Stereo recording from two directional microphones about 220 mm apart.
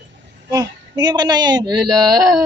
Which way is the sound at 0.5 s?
20° right (ahead or behind).